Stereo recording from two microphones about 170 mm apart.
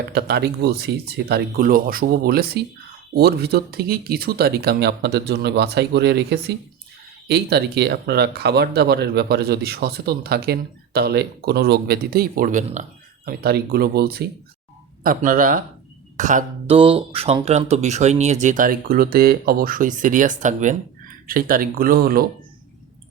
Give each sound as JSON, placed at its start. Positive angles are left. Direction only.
{"t": 0.1, "sound": "speech", "side_deg": -70}
{"t": 13.2, "sound": "speech", "side_deg": -65}
{"t": 16.7, "sound": "speech", "side_deg": -30}